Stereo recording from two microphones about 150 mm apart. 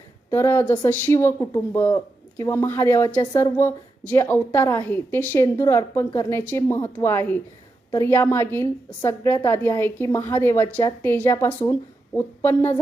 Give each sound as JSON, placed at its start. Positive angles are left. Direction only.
{"t": 0.3, "sound": "a woman's voice", "side_deg": 15}